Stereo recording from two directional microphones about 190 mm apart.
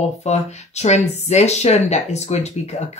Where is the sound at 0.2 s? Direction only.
35° left (ahead or behind).